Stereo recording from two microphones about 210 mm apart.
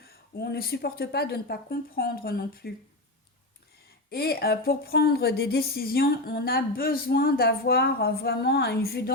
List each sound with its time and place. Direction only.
0.3 s speech: 45° left (ahead or behind)
4.1 s speech: 50° left (ahead or behind)